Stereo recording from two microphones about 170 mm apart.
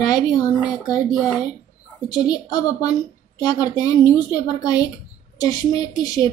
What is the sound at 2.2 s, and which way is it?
A woman's voice, 20° left (ahead or behind).